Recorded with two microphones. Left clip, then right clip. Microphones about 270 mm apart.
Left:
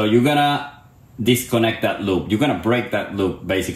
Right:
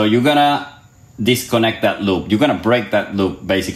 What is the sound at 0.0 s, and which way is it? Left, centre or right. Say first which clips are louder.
A man's voice: right 3 dB; right.